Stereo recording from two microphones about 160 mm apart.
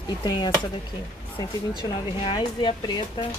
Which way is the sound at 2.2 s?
35° left (ahead or behind).